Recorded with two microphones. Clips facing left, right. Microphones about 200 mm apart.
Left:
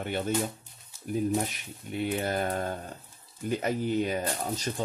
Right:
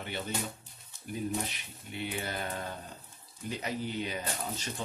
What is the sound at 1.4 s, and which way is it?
Speech, 45° left (ahead or behind).